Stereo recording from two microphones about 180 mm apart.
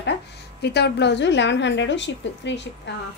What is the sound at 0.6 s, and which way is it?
A woman's voice, 65° left (ahead or behind).